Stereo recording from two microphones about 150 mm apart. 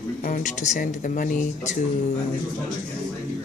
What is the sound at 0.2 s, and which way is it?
Speech, 65° left (ahead or behind).